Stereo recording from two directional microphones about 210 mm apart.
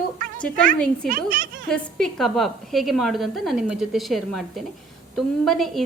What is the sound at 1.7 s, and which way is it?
A woman's voice, 5° left (ahead or behind).